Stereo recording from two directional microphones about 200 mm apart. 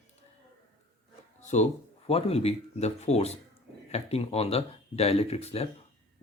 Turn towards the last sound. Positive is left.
turn(degrees=30)  # may be behind; listen again after turning